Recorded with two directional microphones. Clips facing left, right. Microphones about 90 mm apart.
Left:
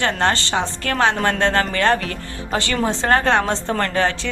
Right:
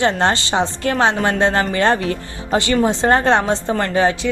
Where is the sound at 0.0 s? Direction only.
20° right (ahead or behind).